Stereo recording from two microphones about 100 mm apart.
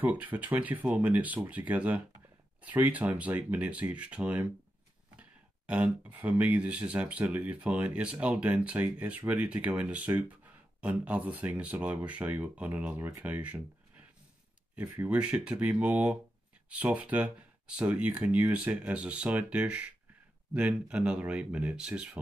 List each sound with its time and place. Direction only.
0.0 s speech: 15° right (ahead or behind)
5.7 s speech: 15° right (ahead or behind)